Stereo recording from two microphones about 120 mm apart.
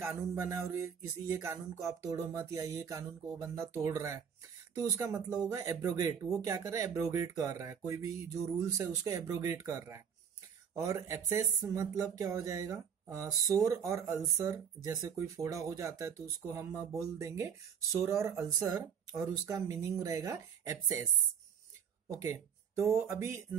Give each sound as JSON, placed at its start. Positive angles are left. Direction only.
{"t": 0.0, "sound": "speech", "side_deg": -20}
{"t": 22.1, "sound": "speech", "side_deg": -25}